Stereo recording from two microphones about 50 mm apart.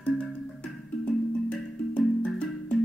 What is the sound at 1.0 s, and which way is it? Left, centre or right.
Music, left.